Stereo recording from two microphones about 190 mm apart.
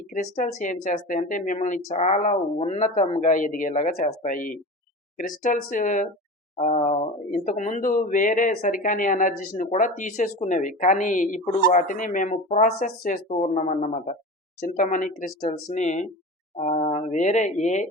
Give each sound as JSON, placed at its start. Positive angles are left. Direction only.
{"t": 0.1, "sound": "speech", "side_deg": 40}